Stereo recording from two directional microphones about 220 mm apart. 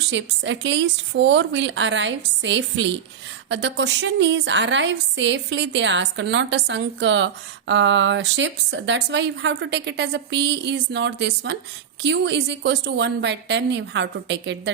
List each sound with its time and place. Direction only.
0.1 s a woman's voice: 55° right (ahead or behind)